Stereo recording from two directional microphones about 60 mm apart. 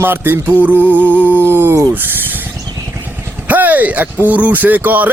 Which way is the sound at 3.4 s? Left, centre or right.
Right.